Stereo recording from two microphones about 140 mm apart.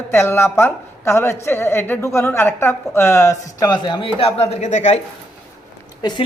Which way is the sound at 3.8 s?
40° left (ahead or behind).